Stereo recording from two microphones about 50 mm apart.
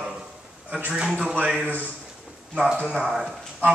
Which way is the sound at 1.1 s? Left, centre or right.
Right.